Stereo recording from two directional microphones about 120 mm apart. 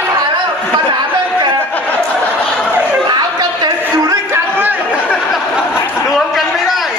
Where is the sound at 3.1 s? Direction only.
35° right (ahead or behind).